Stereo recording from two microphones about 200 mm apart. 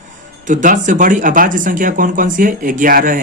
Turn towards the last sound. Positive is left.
turn(degrees=-45)  # may be behind; listen again after turning